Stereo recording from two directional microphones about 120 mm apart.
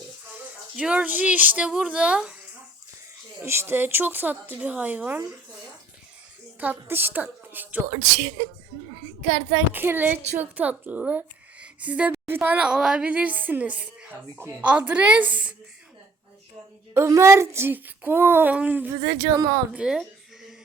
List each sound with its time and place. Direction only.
0.3 s speech: 10° right (ahead or behind)
3.4 s a woman's voice: 20° right (ahead or behind)
6.6 s a woman's voice: 15° right (ahead or behind)
7.9 s speech: 35° right (ahead or behind)
9.7 s a woman's voice: 15° right (ahead or behind)
16.9 s a child's voice: 20° right (ahead or behind)
19.0 s a child's voice: 25° right (ahead or behind)
19.7 s a woman's voice: 5° right (ahead or behind)